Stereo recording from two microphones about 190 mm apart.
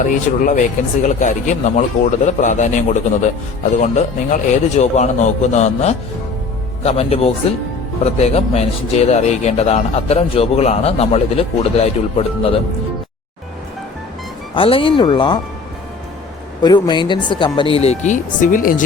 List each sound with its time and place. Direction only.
0.0 s a man's voice: 45° left (ahead or behind)
14.5 s speech: 30° left (ahead or behind)
16.6 s speech: 20° left (ahead or behind); by 18.8 s 45° left (ahead or behind)